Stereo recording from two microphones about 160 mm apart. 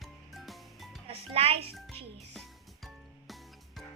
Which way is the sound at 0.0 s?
Centre (ahead or behind).